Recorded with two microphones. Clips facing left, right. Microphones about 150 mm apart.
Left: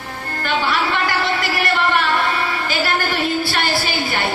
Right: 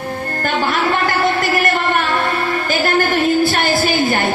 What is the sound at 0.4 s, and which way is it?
Music, 45° right (ahead or behind).